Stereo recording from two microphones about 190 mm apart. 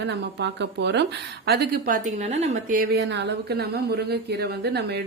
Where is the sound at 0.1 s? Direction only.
65° right (ahead or behind).